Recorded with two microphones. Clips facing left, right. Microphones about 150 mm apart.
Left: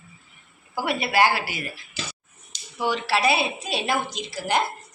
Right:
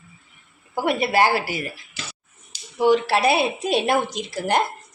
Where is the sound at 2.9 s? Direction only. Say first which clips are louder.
Right 5 dB; 50° right (ahead or behind).